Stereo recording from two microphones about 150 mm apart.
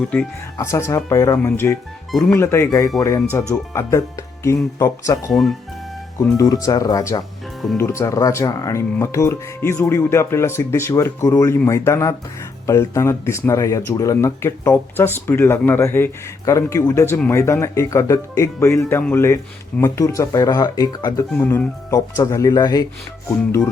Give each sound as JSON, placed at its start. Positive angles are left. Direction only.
{"t": 0.1, "sound": "speech", "side_deg": 15}
{"t": 5.3, "sound": "speech", "side_deg": 0}
{"t": 6.1, "sound": "speech", "side_deg": 25}
{"t": 21.3, "sound": "speech", "side_deg": 15}